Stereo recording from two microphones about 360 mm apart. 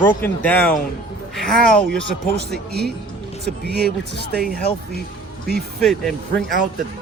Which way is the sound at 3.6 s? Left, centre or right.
Right.